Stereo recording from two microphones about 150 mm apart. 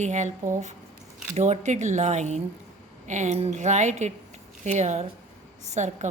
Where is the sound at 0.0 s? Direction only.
50° right (ahead or behind).